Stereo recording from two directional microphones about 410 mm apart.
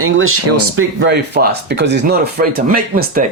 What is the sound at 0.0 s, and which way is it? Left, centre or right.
Speech, right.